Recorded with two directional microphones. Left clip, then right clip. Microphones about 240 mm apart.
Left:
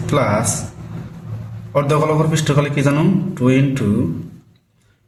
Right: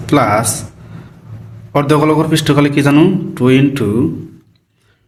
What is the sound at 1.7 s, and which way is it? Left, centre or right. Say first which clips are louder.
A man's voice: right 5 dB; right.